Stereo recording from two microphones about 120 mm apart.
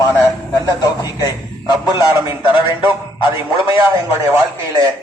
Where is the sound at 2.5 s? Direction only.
45° left (ahead or behind).